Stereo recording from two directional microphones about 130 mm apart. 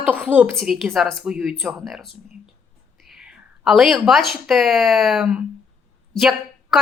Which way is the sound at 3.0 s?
5° right (ahead or behind).